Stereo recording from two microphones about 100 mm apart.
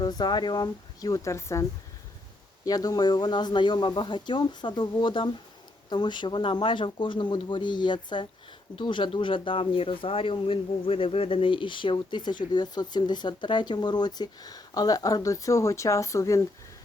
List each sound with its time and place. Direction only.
0.0 s speech: 45° left (ahead or behind); by 1.6 s 30° left (ahead or behind)
2.6 s speech: 40° left (ahead or behind)